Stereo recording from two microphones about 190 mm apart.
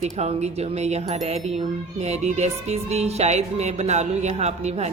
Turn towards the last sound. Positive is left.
turn(degrees=-35)  # may be behind; listen again after turning